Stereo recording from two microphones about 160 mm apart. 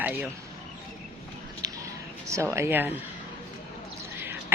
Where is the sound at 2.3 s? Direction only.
15° right (ahead or behind).